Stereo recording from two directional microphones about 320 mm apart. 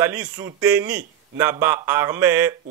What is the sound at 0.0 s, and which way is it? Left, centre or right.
A man's voice, centre.